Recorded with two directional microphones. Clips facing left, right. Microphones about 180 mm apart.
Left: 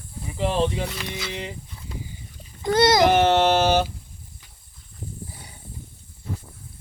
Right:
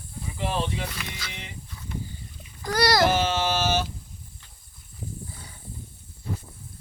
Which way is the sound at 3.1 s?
65° left (ahead or behind).